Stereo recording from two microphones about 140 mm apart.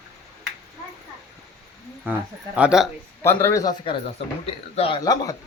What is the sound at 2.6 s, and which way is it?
Speech, 5° right (ahead or behind).